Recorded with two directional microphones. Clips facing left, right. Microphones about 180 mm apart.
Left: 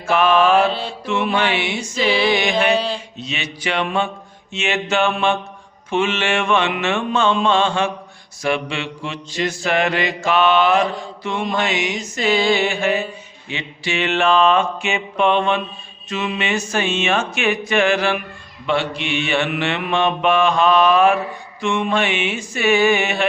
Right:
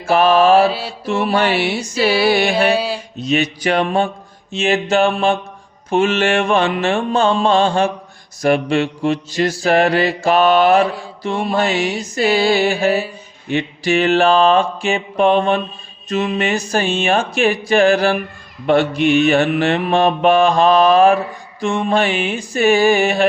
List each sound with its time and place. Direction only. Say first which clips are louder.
0.0 s mantra: right 3 dB; 35° right (ahead or behind)
0.6 s mantra: right 3 dB; 5° right (ahead or behind)
1.0 s mantra: right 3 dB; 40° right (ahead or behind)
2.7 s mantra: right 1 dB; 10° right (ahead or behind)
3.2 s mantra: right 11 dB; 40° right (ahead or behind)